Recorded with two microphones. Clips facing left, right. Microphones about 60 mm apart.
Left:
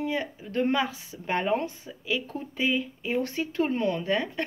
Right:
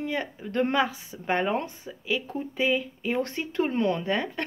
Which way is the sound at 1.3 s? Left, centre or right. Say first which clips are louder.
Even; right.